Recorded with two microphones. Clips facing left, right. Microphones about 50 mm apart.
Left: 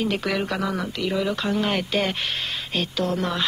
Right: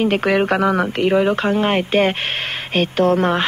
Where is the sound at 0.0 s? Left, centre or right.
Right.